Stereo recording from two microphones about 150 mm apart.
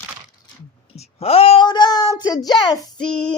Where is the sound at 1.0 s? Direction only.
40° left (ahead or behind).